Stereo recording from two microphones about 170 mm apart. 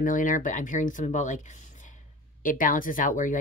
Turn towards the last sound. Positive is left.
turn(degrees=50)  # may be behind; listen again after turning